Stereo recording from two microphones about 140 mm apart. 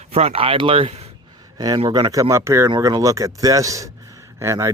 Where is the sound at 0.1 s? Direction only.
45° right (ahead or behind).